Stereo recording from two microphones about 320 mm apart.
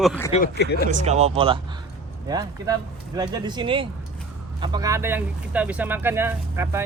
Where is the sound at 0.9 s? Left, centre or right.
Right.